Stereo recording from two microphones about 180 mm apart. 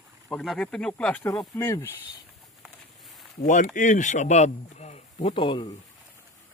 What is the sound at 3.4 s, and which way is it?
Speech, 45° left (ahead or behind).